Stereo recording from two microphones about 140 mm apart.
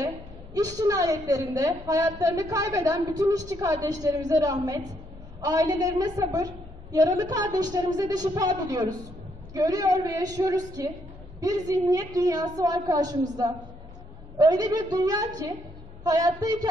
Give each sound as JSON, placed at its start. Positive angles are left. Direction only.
{"t": 0.6, "sound": "a woman's voice", "side_deg": -25}
{"t": 14.4, "sound": "a woman's voice", "side_deg": -25}